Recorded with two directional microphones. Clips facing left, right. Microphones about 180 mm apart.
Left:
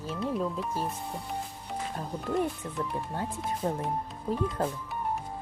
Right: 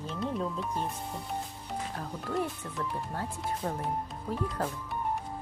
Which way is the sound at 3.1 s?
20° left (ahead or behind).